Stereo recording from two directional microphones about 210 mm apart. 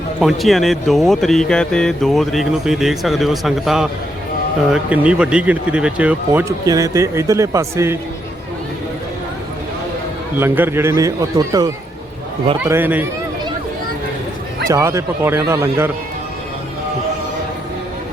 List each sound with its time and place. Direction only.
0.2 s a man's voice: centre (ahead or behind)
10.3 s a man's voice: 10° right (ahead or behind)
14.7 s a man's voice: 15° right (ahead or behind)